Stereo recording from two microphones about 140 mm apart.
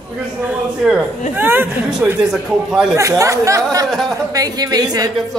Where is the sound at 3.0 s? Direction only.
25° right (ahead or behind).